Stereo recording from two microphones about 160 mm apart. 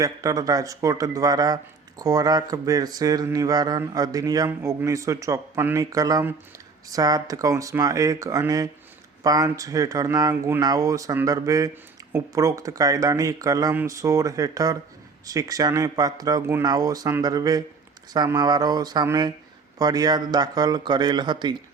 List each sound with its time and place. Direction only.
0.0 s speech: 20° right (ahead or behind)